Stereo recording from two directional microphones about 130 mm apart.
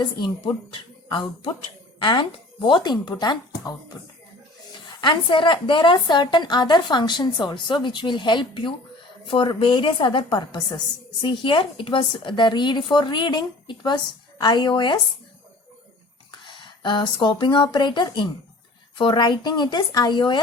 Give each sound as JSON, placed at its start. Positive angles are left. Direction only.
{"t": 0.0, "sound": "speech", "side_deg": 35}
{"t": 4.9, "sound": "speech", "side_deg": 40}
{"t": 16.4, "sound": "speech", "side_deg": 40}